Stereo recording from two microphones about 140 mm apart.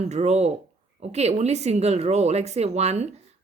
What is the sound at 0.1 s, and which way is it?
Speech, 50° right (ahead or behind).